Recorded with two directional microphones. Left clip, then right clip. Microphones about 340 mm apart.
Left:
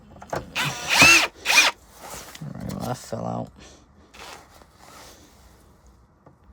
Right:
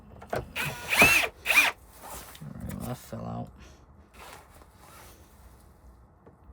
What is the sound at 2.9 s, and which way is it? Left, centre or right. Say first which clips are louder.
Speech: left 10 dB; centre.